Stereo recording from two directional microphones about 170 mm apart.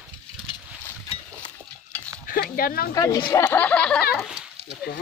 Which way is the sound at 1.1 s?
30° left (ahead or behind).